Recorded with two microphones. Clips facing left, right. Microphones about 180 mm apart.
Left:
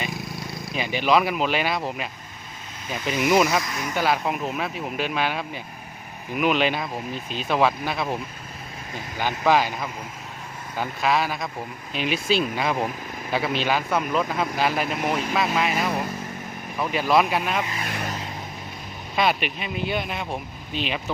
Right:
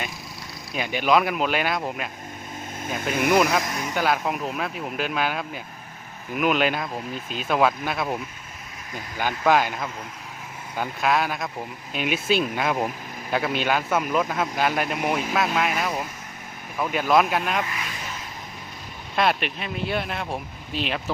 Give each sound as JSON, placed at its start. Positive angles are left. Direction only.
{"t": 1.0, "sound": "speech", "side_deg": 0}
{"t": 2.8, "sound": "speech", "side_deg": -50}
{"t": 3.3, "sound": "speech", "side_deg": 5}
{"t": 9.2, "sound": "speech", "side_deg": 0}
{"t": 17.8, "sound": "speech", "side_deg": 55}
{"t": 19.1, "sound": "speech", "side_deg": 0}